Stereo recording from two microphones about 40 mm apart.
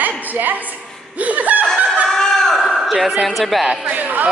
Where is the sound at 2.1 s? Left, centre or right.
Centre.